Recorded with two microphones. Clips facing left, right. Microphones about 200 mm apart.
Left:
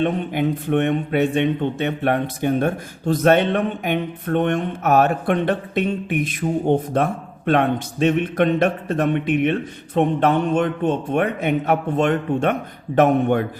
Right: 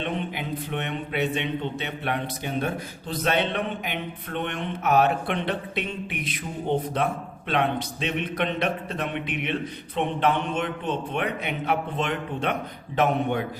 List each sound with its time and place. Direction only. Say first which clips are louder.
0.0 s speech: left 9 dB; 50° left (ahead or behind)